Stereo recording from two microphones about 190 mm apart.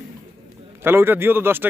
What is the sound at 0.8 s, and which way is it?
Speech, 10° right (ahead or behind).